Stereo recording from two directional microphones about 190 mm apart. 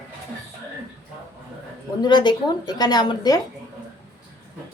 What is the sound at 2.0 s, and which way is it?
A woman's voice, 20° left (ahead or behind).